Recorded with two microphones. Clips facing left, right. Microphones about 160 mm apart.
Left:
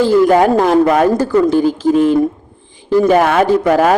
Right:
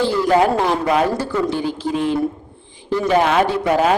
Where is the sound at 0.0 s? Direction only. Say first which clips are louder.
Left 6 dB; 45° left (ahead or behind).